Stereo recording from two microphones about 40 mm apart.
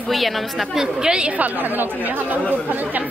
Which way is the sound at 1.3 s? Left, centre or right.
Right.